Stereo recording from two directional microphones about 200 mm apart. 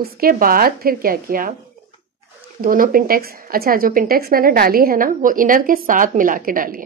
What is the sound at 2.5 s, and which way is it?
Speech, 45° right (ahead or behind).